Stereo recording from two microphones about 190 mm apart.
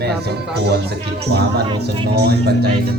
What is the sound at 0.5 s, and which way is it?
Speech, 60° right (ahead or behind).